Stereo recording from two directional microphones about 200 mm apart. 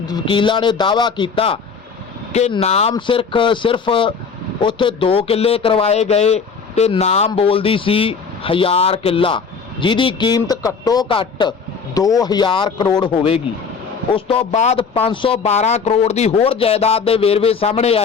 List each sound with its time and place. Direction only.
0.0 s speech: 20° left (ahead or behind)